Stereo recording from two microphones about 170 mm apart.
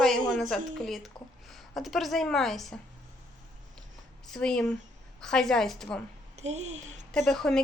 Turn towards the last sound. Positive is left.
turn(degrees=5)  # may be behind; listen again after turning